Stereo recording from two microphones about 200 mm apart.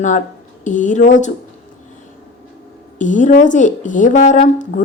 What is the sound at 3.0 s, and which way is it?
A woman's voice, 40° left (ahead or behind).